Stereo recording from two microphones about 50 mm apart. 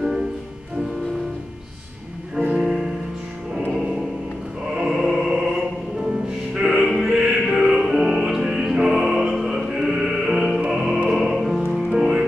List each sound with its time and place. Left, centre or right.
2.5 s music: centre
4.6 s chant: centre
6.6 s music: centre
7.1 s music: right
7.4 s music: centre